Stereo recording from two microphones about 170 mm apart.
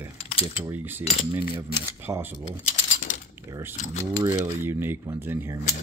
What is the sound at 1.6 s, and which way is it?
Speech, 15° right (ahead or behind).